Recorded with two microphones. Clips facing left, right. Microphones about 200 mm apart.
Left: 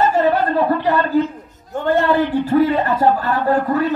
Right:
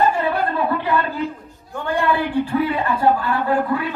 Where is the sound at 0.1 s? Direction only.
40° left (ahead or behind).